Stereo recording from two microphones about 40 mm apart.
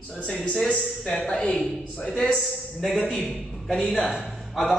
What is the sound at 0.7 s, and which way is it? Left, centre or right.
Speech, left.